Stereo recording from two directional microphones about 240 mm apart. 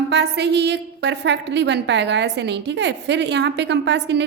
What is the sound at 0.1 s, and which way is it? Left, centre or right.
A woman's voice, right.